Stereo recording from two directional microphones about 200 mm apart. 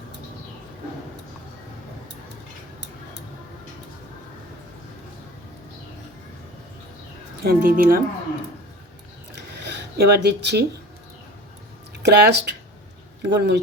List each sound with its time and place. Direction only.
7.4 s speech: 45° right (ahead or behind)
9.5 s a sound: 55° right (ahead or behind)
12.0 s speech: 55° right (ahead or behind)